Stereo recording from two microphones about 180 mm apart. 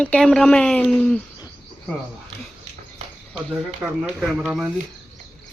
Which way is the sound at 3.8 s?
5° right (ahead or behind).